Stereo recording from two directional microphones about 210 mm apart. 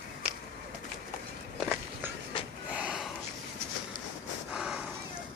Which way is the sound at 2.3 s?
25° left (ahead or behind).